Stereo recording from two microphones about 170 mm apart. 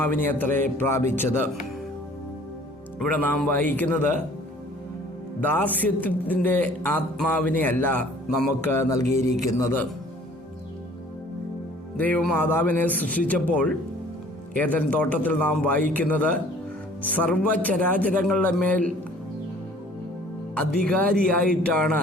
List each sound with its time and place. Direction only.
0.0 s a man's voice: 10° left (ahead or behind)
3.0 s a man's voice: 10° left (ahead or behind)
5.4 s a man's voice: 10° left (ahead or behind)
8.6 s mantra: 20° left (ahead or behind)
9.6 s a man's voice: 15° left (ahead or behind)
11.9 s a man's voice: 10° left (ahead or behind)
20.6 s speech: 5° left (ahead or behind)